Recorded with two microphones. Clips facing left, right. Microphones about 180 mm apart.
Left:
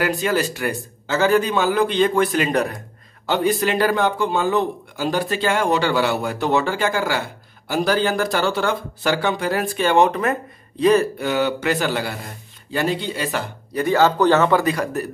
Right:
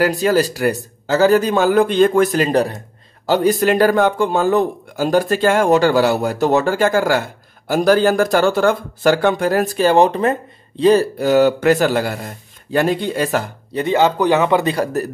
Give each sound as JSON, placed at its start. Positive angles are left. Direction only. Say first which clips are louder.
{"t": 0.0, "sound": "speech", "louder": "right 5 dB", "side_deg": -40}
{"t": 13.7, "sound": "speech", "louder": "right 1 dB", "side_deg": -20}
{"t": 14.6, "sound": "speech", "louder": "right 3 dB", "side_deg": -30}